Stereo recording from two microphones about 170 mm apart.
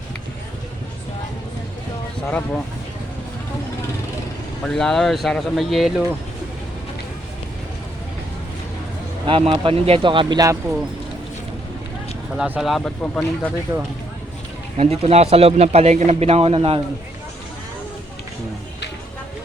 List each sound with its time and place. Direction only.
2.2 s speech: 5° left (ahead or behind)
4.6 s speech: 5° left (ahead or behind)
9.2 s speech: 30° right (ahead or behind)
12.4 s speech: 5° right (ahead or behind)
13.7 s speech: 15° right (ahead or behind)
14.8 s a man's voice: 35° right (ahead or behind)